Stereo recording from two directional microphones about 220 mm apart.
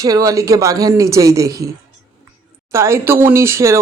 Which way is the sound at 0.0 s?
15° right (ahead or behind).